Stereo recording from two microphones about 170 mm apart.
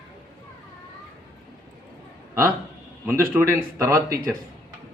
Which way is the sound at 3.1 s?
15° right (ahead or behind).